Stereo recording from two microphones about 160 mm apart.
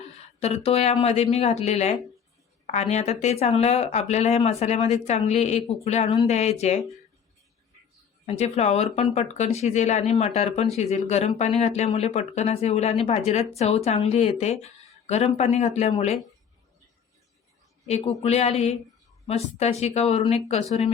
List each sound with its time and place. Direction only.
0.4 s speech: 40° left (ahead or behind)
8.3 s speech: 45° left (ahead or behind)
17.8 s speech: 40° left (ahead or behind)